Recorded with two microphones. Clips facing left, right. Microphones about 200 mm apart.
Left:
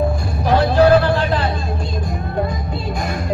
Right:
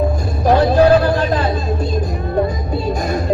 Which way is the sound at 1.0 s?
40° right (ahead or behind).